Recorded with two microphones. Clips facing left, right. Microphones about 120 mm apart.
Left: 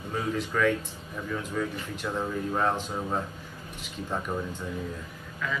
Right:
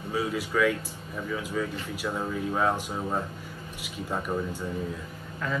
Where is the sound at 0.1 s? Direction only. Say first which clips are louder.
Right 1 dB; 5° right (ahead or behind).